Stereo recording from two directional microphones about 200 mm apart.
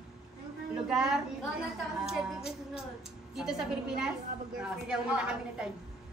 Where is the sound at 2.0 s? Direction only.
5° right (ahead or behind).